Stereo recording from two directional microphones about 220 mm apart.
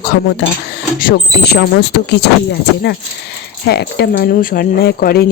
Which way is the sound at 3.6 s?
50° left (ahead or behind).